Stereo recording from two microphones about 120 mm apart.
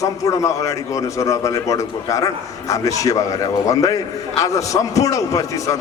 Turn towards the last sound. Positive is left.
turn(degrees=30)  # may be behind; listen again after turning